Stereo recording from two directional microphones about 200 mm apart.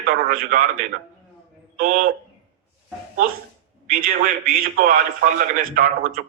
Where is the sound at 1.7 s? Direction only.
45° right (ahead or behind).